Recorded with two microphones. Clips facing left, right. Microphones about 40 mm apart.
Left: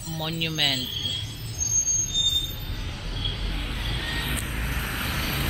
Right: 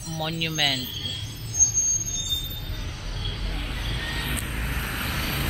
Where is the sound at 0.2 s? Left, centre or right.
Centre.